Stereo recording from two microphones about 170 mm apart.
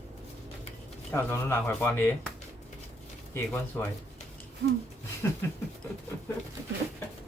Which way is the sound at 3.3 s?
10° left (ahead or behind).